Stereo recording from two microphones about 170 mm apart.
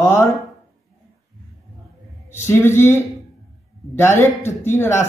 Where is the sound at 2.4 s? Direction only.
15° left (ahead or behind).